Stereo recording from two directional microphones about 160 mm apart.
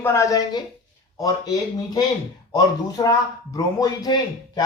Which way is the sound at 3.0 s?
25° left (ahead or behind).